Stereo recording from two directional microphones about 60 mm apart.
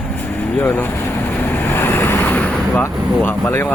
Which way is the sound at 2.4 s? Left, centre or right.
Left.